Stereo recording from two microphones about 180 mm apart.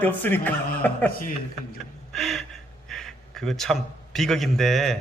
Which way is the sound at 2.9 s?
Centre (ahead or behind).